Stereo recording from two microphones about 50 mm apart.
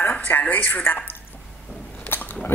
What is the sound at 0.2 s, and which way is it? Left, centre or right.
Speech, left.